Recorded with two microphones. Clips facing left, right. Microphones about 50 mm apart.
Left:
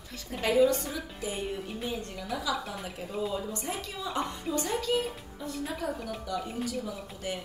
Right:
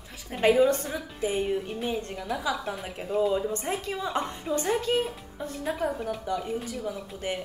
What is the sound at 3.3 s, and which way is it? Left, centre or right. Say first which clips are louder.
A woman's voice: right 6 dB; right.